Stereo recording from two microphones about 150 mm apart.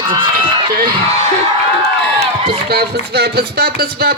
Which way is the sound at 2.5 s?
90° right.